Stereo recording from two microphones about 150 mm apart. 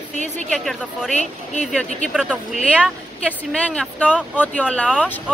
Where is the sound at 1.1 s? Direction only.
50° left (ahead or behind).